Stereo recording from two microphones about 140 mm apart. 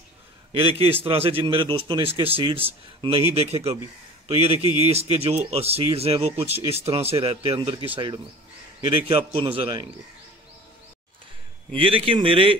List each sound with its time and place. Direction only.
0.5 s a man's voice: 40° right (ahead or behind)
11.7 s a man's voice: 40° right (ahead or behind)